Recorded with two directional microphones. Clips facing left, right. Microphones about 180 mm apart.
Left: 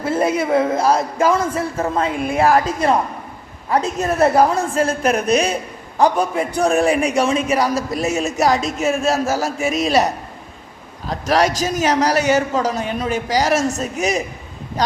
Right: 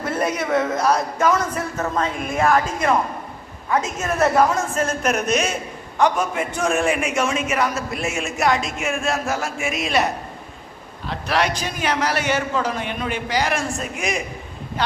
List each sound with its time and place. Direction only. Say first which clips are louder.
0.0 s a man's voice: left 5 dB; 30° left (ahead or behind)